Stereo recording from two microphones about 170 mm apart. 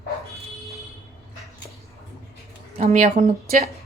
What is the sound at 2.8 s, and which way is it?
Speech, 45° right (ahead or behind).